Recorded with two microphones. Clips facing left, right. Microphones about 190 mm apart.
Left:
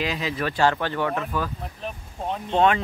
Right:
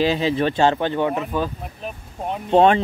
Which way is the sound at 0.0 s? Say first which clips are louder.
Right 8 dB; 30° right (ahead or behind).